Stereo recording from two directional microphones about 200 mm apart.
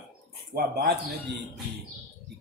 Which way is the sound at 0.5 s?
45° right (ahead or behind).